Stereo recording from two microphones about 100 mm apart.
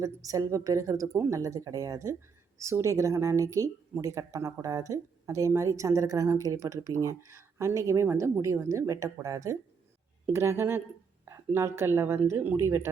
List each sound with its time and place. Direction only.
0.0 s a woman's voice: 35° right (ahead or behind)